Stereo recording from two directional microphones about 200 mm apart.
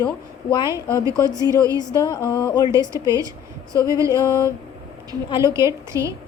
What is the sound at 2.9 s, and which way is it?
A woman's voice, 15° right (ahead or behind).